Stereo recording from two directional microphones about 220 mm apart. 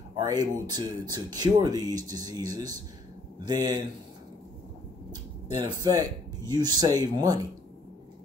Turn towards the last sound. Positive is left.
turn(degrees=-20)  # may be behind; listen again after turning